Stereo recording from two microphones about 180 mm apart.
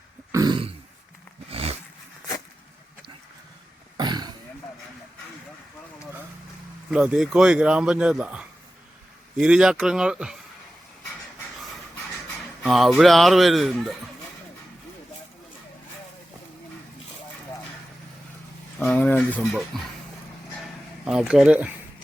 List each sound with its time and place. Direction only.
0.3 s a sound: 20° right (ahead or behind)
3.9 s wild animals: 25° right (ahead or behind)
6.9 s a man's voice: 5° right (ahead or behind)
12.6 s a man's voice: centre (ahead or behind)
18.9 s a man's voice: 10° left (ahead or behind)
21.0 s a man's voice: 5° right (ahead or behind)